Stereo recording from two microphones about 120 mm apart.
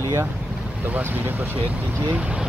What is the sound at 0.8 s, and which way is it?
Speech, 15° right (ahead or behind).